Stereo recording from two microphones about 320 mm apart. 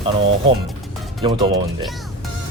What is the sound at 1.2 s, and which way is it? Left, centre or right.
Speech, centre.